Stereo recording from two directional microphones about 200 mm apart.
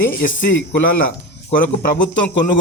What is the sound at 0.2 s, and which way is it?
Speech, 40° left (ahead or behind).